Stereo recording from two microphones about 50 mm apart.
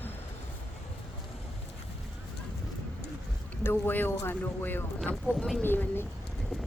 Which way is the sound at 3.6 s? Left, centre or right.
Left.